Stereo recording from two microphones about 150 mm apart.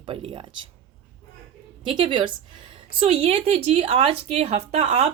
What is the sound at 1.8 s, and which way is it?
A woman's voice, 30° right (ahead or behind).